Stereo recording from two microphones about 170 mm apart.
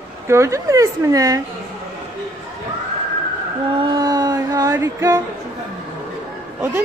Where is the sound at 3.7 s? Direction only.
25° right (ahead or behind).